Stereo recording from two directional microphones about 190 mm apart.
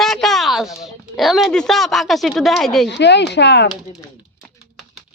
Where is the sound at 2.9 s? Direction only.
65° left (ahead or behind).